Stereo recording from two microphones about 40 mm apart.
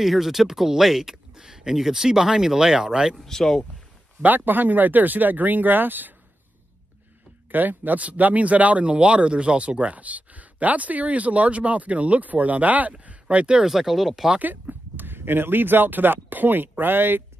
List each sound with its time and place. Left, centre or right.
0.0 s speech: centre
3.2 s speech: centre
4.2 s speech: right
7.5 s speech: right
8.0 s speech: right
13.7 s speech: centre
14.4 s speech: right